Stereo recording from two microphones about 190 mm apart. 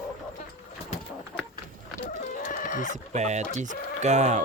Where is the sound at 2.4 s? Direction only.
45° left (ahead or behind).